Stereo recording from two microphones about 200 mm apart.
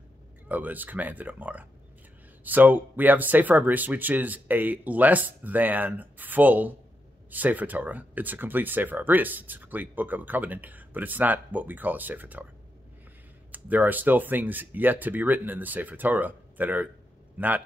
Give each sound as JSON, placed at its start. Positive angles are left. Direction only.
{"t": 0.5, "sound": "speech", "side_deg": -10}
{"t": 13.5, "sound": "speech", "side_deg": -10}